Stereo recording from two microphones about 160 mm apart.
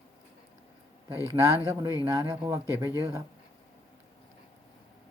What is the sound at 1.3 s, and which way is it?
Speech, 20° right (ahead or behind).